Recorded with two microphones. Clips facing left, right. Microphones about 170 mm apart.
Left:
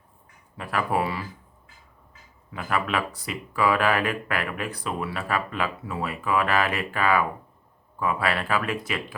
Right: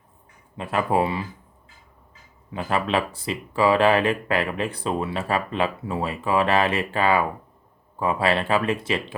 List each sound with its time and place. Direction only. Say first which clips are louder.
0.5 s speech: right 4 dB; 25° right (ahead or behind)
2.5 s speech: right 3 dB; 25° right (ahead or behind)